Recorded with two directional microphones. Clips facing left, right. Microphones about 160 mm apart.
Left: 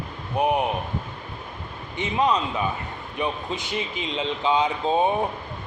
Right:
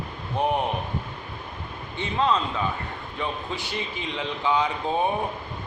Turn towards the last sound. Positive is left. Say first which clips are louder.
# left 3 dB
turn(degrees=20)  # may be behind; listen again after turning